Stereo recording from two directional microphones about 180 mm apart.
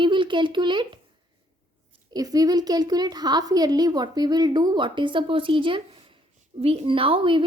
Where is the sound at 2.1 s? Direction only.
20° right (ahead or behind).